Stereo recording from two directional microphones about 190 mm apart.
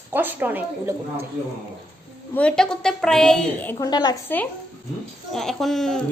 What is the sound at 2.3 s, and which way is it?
A woman's voice, 5° left (ahead or behind).